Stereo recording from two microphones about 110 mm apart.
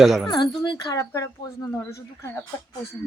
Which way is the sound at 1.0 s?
30° left (ahead or behind).